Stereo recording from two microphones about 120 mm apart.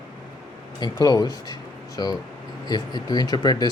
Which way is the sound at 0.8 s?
35° left (ahead or behind).